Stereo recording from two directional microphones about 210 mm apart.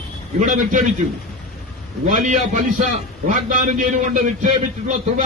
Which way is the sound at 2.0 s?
35° right (ahead or behind).